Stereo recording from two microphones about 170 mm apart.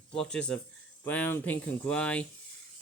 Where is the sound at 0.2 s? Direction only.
5° left (ahead or behind).